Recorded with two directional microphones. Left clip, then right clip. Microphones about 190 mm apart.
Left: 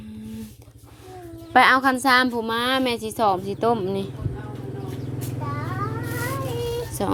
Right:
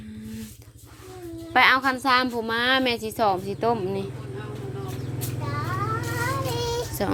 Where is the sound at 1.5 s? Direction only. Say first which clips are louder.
Left 3 dB; 35° left (ahead or behind); by 4.1 s 20° left (ahead or behind).